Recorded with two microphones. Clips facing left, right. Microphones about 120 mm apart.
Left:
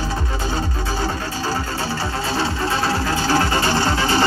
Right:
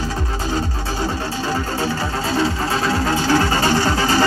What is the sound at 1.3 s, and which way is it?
Music, 35° left (ahead or behind).